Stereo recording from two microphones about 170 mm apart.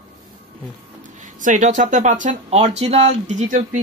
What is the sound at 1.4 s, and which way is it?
Speech, 50° right (ahead or behind).